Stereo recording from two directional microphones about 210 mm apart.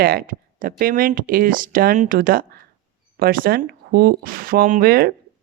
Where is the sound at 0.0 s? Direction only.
45° right (ahead or behind).